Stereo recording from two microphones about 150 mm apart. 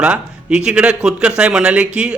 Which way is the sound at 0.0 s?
5° right (ahead or behind).